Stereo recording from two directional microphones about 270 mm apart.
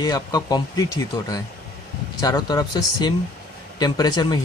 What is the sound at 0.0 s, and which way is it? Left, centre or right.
Speech, centre.